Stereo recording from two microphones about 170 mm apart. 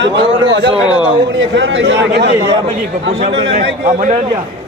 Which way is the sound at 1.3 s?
90° right.